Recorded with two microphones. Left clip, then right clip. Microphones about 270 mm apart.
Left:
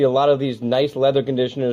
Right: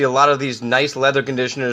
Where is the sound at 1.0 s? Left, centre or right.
Centre.